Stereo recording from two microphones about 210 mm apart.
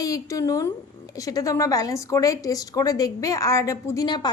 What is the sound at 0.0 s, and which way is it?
A woman's voice, 15° left (ahead or behind).